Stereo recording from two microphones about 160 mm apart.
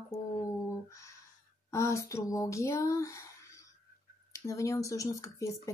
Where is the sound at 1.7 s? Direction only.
20° left (ahead or behind).